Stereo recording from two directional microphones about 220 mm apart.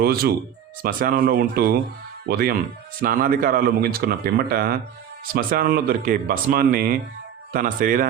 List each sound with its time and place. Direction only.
0.0 s speech: 45° right (ahead or behind)